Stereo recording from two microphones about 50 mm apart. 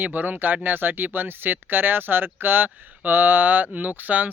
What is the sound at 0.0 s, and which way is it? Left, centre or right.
Speech, right.